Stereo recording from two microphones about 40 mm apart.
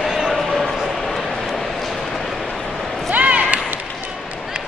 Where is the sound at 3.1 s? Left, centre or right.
Right.